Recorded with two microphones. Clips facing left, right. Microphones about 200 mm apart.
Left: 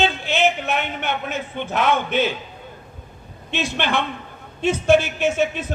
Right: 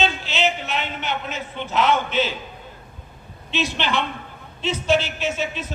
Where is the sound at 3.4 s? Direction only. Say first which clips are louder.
Left 1 dB; 55° left (ahead or behind).